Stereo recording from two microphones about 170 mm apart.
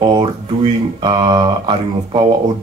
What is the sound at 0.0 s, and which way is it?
Speech, 25° right (ahead or behind).